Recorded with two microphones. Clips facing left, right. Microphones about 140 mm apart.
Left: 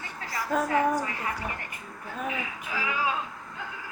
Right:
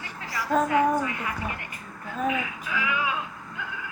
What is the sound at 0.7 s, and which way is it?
Music, 35° left (ahead or behind).